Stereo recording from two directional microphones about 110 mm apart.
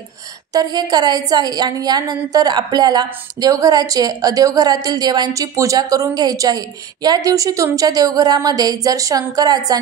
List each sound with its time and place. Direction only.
0.5 s a woman's voice: 35° right (ahead or behind)